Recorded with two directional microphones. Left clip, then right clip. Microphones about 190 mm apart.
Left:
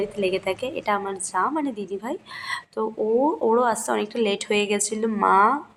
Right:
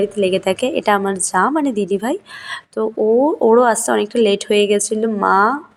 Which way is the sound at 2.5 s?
20° right (ahead or behind).